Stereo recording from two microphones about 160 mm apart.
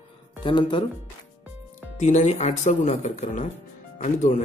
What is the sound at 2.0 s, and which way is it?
Speech, 45° left (ahead or behind).